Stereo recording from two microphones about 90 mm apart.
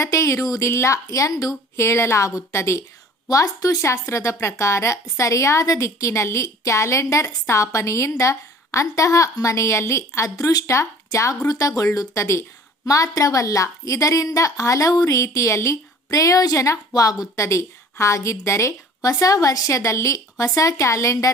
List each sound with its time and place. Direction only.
0.0 s a woman's voice: 35° left (ahead or behind)